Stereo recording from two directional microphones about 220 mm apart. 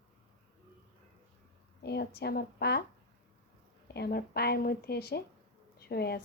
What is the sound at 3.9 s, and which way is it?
A woman's voice, 45° left (ahead or behind).